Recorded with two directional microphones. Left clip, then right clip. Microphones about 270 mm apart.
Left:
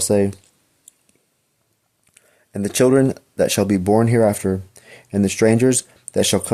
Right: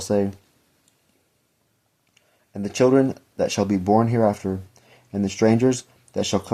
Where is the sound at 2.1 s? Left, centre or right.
Left.